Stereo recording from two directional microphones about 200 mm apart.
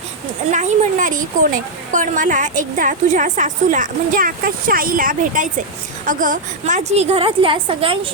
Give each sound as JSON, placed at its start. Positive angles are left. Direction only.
{"t": 0.5, "sound": "a woman's voice", "side_deg": -40}